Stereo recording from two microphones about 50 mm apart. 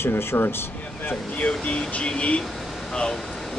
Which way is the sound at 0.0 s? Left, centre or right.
Left.